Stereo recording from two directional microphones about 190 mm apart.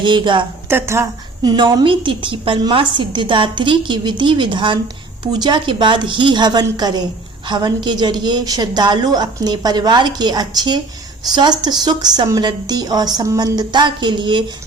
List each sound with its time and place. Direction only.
0.0 s a woman's voice: 25° right (ahead or behind)
0.7 s a woman's voice: 15° right (ahead or behind)